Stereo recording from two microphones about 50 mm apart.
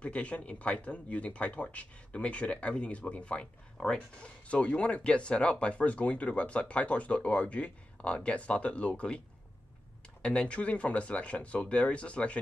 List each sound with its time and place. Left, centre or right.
0.0 s speech: left
10.2 s speech: left